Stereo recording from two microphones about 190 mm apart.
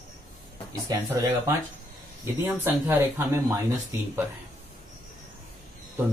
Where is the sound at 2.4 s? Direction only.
10° right (ahead or behind).